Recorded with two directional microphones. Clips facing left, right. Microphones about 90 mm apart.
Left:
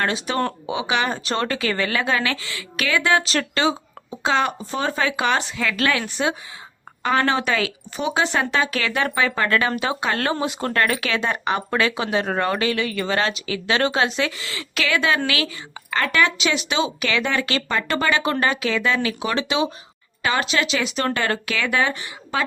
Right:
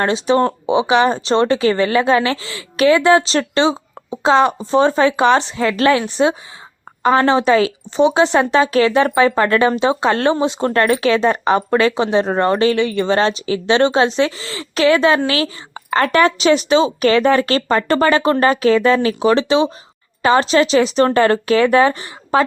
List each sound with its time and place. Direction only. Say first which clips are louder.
0.0 s speech: right 8 dB; 25° right (ahead or behind)